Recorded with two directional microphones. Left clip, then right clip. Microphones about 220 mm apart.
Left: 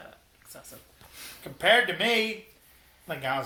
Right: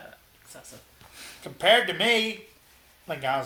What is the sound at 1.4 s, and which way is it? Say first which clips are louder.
Speech: right 1 dB; 30° right (ahead or behind).